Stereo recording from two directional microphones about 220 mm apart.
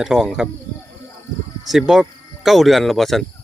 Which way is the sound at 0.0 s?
Centre (ahead or behind).